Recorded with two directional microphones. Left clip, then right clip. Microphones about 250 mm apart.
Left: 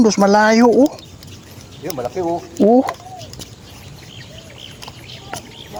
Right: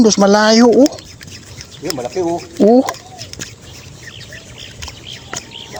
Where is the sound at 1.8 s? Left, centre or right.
Right.